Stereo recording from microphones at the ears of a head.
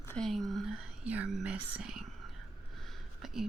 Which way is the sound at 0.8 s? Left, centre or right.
Right.